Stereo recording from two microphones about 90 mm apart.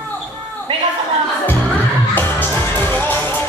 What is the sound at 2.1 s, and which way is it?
Music, 20° left (ahead or behind).